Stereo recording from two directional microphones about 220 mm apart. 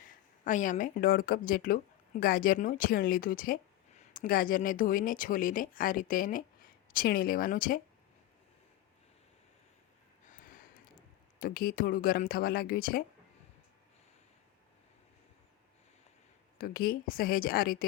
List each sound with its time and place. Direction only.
0.4 s speech: 35° left (ahead or behind)
10.2 s a sound: 40° left (ahead or behind)
11.3 s speech: 40° left (ahead or behind)
16.6 s speech: 45° left (ahead or behind)